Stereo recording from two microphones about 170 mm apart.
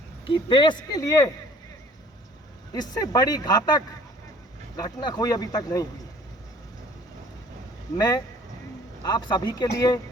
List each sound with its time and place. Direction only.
0.3 s speech: 30° left (ahead or behind)
2.7 s speech: 20° left (ahead or behind)
7.9 s speech: 20° left (ahead or behind)